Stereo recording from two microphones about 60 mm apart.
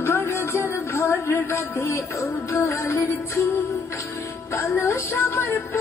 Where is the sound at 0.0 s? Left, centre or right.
Left.